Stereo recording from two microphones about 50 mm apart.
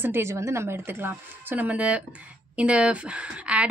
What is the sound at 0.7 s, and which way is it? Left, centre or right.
Speech, right.